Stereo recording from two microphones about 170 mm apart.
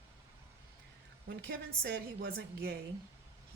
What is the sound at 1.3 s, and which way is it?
A woman's voice, 70° right (ahead or behind).